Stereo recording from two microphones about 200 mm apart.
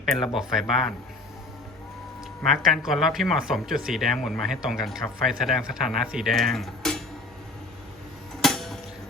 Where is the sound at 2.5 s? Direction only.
Centre (ahead or behind).